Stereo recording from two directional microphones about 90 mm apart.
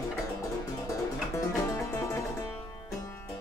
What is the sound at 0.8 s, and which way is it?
Music, 35° left (ahead or behind).